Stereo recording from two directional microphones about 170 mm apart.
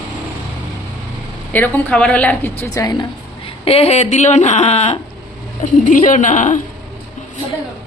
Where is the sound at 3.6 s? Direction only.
35° left (ahead or behind).